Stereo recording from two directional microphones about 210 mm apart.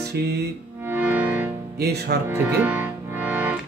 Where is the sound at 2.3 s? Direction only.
10° right (ahead or behind).